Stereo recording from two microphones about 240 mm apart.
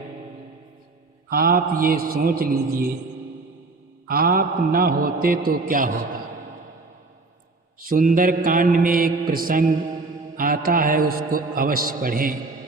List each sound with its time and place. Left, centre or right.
1.3 s a man's voice: right
4.1 s a man's voice: right
7.9 s a man's voice: right